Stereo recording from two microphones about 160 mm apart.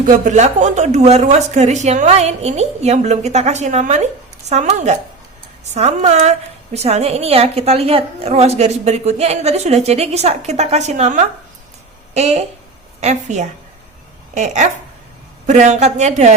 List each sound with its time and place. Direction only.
0.0 s a woman's voice: 50° right (ahead or behind)